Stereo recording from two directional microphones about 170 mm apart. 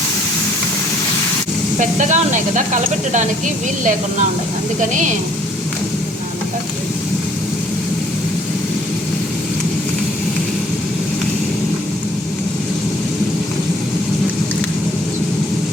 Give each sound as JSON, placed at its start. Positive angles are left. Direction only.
{"t": 1.8, "sound": "speech", "side_deg": -45}